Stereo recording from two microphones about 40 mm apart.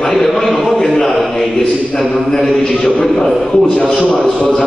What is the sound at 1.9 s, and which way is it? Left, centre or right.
A man's voice, centre.